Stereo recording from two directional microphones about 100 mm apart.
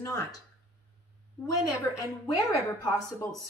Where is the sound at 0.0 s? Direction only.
35° left (ahead or behind).